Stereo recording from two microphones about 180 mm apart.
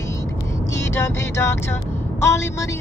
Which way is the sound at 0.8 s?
15° left (ahead or behind).